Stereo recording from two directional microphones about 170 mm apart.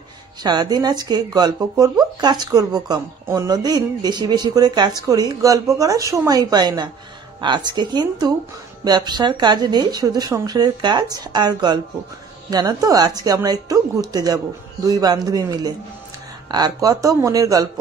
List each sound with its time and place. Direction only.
0.4 s speech: 25° right (ahead or behind)